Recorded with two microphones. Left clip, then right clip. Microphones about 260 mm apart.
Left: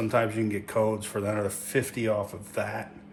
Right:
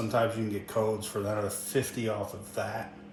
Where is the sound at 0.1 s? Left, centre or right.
Left.